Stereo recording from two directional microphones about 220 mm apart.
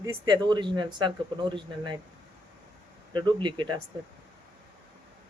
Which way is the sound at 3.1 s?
20° right (ahead or behind).